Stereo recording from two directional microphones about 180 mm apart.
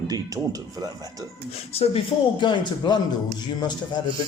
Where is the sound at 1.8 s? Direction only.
30° left (ahead or behind).